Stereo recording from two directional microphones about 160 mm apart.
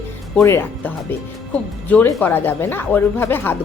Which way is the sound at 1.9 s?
10° left (ahead or behind).